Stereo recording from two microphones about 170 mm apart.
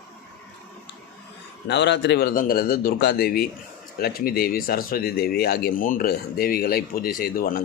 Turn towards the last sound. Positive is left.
turn(degrees=60)  # may be behind; listen again after turning